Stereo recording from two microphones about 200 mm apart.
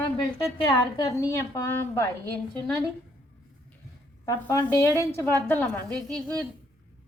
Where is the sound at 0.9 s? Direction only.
20° left (ahead or behind).